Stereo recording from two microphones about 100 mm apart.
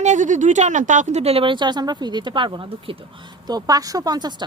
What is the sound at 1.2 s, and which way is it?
Speech, 80° right.